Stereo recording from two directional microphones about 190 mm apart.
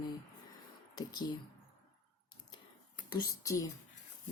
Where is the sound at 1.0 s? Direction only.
20° left (ahead or behind).